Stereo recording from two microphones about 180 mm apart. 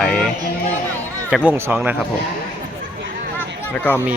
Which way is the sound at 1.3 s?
5° right (ahead or behind).